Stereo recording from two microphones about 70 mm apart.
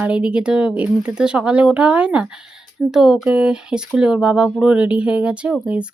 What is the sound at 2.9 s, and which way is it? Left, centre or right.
Speech, centre.